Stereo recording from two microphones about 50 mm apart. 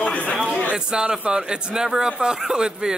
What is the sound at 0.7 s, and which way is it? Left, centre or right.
A man's voice, centre.